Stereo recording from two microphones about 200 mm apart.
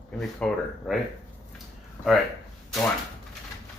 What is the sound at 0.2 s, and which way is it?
Speech, centre (ahead or behind).